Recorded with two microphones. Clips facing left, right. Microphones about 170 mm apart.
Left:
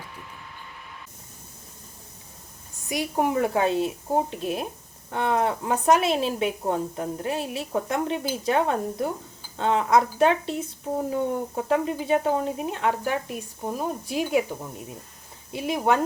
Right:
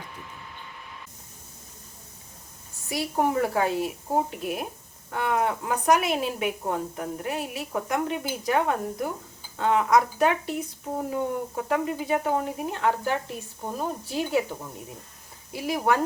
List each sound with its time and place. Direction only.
2.9 s speech: 20° left (ahead or behind)